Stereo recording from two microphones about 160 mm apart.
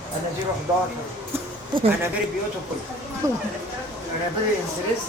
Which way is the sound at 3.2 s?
20° right (ahead or behind).